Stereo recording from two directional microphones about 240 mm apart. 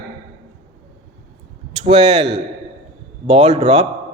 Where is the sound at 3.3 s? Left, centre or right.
Right.